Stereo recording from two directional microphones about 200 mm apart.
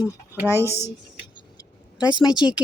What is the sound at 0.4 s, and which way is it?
Speech, 15° left (ahead or behind).